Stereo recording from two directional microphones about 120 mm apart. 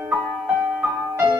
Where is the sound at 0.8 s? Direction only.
20° right (ahead or behind).